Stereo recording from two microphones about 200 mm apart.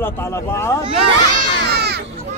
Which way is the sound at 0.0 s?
15° left (ahead or behind).